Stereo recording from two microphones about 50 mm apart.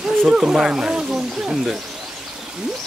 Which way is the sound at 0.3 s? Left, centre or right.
Centre.